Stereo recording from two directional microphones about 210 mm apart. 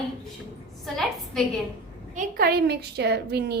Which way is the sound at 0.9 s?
Centre (ahead or behind).